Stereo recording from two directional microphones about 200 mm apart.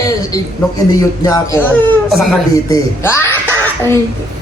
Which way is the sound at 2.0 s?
Centre (ahead or behind).